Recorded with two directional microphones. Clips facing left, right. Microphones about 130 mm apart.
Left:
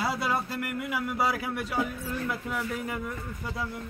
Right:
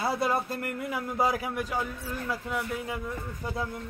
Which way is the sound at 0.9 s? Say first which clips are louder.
Right 1 dB; 20° right (ahead or behind).